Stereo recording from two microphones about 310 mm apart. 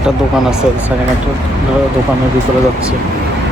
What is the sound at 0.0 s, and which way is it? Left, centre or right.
Speech, centre.